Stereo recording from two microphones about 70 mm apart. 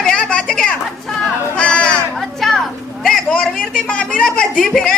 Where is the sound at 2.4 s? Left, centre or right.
Centre.